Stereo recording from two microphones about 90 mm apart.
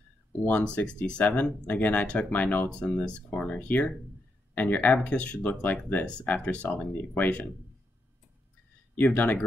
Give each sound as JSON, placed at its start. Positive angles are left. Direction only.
{"t": 0.5, "sound": "speech", "side_deg": 15}
{"t": 8.9, "sound": "speech", "side_deg": 20}